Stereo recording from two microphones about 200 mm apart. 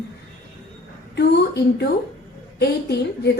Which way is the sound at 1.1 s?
55° left (ahead or behind).